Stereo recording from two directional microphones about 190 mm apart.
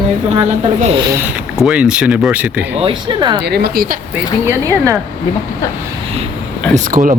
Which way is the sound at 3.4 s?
55° right (ahead or behind).